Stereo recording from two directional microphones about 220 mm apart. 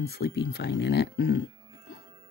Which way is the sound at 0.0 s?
45° left (ahead or behind).